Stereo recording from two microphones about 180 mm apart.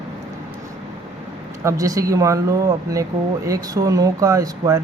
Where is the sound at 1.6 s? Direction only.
20° right (ahead or behind).